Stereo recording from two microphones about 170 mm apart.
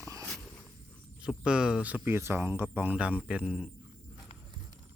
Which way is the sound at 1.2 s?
5° right (ahead or behind).